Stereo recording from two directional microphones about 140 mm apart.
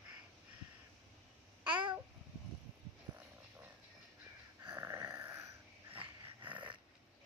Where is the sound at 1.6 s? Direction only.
35° right (ahead or behind).